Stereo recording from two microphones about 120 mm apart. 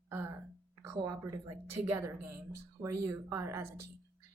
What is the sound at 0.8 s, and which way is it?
A woman's voice, 30° right (ahead or behind).